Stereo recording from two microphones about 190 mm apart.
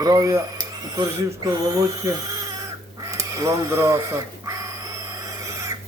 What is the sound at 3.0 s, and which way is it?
Crow, 15° right (ahead or behind).